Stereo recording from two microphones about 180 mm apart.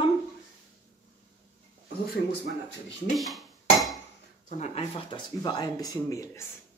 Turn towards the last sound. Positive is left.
turn(degrees=15)  # may be behind; listen again after turning